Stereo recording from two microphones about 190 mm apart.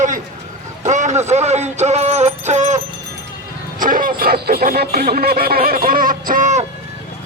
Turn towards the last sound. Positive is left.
turn(degrees=-40)  # may be behind; listen again after turning